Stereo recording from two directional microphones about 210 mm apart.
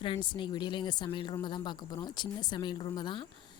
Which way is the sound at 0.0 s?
25° left (ahead or behind).